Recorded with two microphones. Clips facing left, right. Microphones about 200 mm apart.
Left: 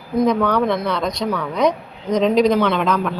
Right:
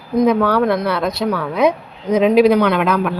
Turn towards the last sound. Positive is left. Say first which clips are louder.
# right 3 dB
turn(degrees=-5)  # may be behind; listen again after turning